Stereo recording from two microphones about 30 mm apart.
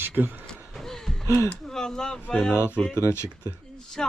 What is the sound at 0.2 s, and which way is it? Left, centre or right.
Speech, right.